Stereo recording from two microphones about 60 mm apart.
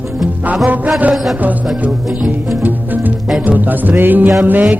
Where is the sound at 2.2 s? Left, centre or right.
Right.